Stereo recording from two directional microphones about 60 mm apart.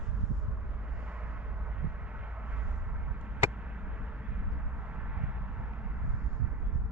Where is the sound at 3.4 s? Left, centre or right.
Right.